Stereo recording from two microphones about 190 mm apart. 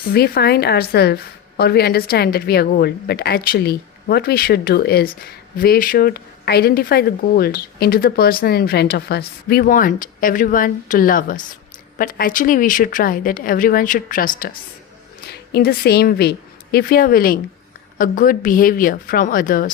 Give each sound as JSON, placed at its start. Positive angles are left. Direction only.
{"t": 0.0, "sound": "a woman's voice", "side_deg": 55}